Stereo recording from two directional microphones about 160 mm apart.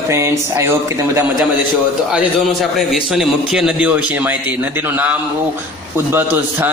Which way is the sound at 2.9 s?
5° right (ahead or behind).